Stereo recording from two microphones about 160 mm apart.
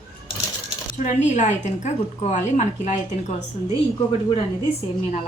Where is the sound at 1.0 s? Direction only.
50° left (ahead or behind).